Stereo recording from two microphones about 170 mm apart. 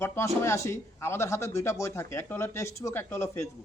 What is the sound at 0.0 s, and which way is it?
Speech, 15° left (ahead or behind).